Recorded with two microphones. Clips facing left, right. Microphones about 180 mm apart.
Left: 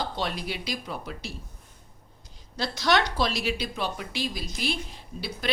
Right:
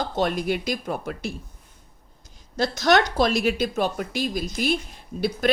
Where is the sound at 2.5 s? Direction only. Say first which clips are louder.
Right 5 dB; 45° right (ahead or behind).